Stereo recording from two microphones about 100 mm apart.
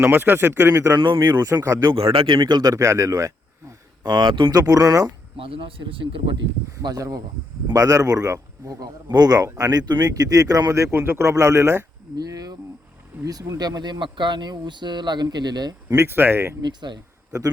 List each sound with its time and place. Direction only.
0.0 s speech: 20° right (ahead or behind)
0.9 s speech: 50° right (ahead or behind)
1.2 s speech: 40° right (ahead or behind)
1.6 s speech: 30° right (ahead or behind)
2.1 s speech: 50° right (ahead or behind)
4.6 s speech: 40° right (ahead or behind)
5.4 s speech: 60° right (ahead or behind)
6.8 s speech: 35° right (ahead or behind)
10.9 s speech: 20° right (ahead or behind)
12.1 s speech: 40° right (ahead or behind)
13.6 s speech: 45° right (ahead or behind)
16.0 s speech: 20° right (ahead or behind)
16.6 s speech: 45° right (ahead or behind)